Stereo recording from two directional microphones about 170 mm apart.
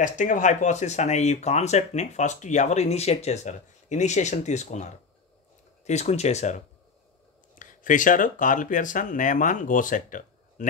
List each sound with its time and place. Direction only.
0.0 s speech: 50° left (ahead or behind)
5.9 s speech: 40° left (ahead or behind)